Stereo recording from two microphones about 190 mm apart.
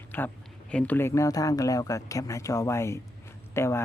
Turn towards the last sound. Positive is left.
turn(degrees=15)  # may be behind; listen again after turning